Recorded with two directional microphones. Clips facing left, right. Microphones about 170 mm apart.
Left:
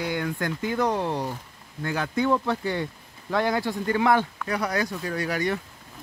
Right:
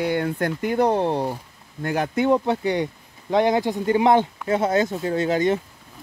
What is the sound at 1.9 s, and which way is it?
Speech, 20° right (ahead or behind).